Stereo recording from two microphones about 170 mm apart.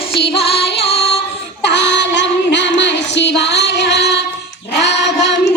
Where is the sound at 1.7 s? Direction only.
90° left.